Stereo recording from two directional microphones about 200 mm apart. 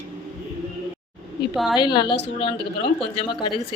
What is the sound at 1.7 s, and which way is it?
Speech, 20° left (ahead or behind).